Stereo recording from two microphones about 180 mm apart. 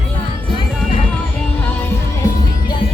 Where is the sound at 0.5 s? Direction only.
25° left (ahead or behind).